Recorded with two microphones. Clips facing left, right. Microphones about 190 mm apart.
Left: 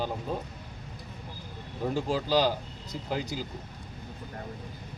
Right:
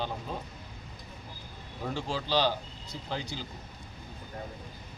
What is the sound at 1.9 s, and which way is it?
Speech, 10° left (ahead or behind).